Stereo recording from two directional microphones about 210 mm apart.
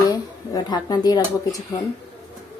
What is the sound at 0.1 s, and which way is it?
Speech, 20° left (ahead or behind).